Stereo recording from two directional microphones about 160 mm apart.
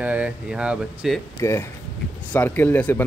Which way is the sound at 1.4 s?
15° left (ahead or behind).